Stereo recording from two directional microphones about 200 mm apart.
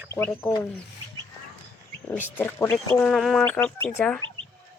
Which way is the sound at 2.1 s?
10° left (ahead or behind).